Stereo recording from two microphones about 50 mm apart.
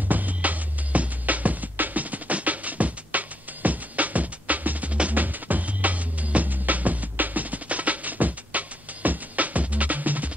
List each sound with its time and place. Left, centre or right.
0.1 s music: right